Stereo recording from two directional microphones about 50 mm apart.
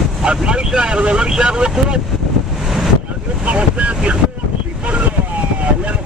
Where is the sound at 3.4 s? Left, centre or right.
Right.